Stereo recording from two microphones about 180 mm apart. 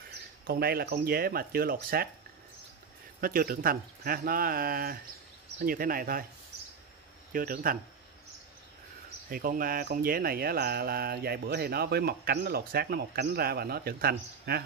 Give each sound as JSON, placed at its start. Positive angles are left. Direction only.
{"t": 0.5, "sound": "speech", "side_deg": -60}
{"t": 3.2, "sound": "speech", "side_deg": -55}
{"t": 7.3, "sound": "speech", "side_deg": -50}
{"t": 9.3, "sound": "speech", "side_deg": -55}